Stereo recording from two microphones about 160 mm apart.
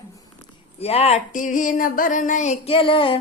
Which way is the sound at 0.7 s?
40° left (ahead or behind).